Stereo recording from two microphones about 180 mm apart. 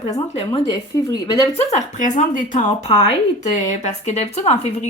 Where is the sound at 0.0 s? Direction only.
30° left (ahead or behind).